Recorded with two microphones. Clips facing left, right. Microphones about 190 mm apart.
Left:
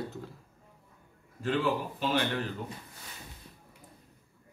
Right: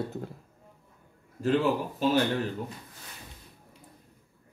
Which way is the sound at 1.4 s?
40° right (ahead or behind).